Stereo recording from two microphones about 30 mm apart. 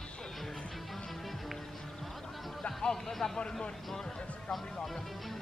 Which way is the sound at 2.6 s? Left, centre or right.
Centre.